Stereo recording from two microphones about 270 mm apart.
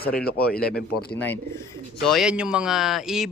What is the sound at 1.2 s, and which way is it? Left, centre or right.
Speech, centre.